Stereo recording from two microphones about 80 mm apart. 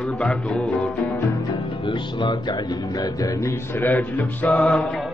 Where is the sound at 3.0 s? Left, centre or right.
Left.